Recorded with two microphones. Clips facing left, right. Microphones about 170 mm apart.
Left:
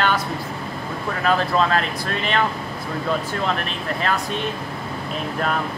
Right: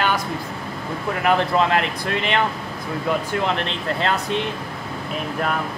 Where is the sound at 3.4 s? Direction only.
20° right (ahead or behind).